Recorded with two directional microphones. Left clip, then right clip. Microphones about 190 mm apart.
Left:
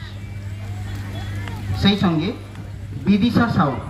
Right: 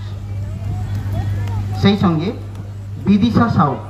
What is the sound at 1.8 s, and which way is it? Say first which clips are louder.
A woman's voice: right 3 dB; 40° left (ahead or behind).